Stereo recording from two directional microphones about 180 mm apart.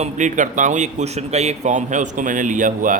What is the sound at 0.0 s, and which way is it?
Speech, 45° right (ahead or behind).